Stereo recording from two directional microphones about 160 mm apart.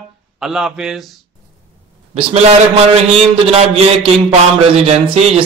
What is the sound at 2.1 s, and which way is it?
A man's voice, 40° right (ahead or behind).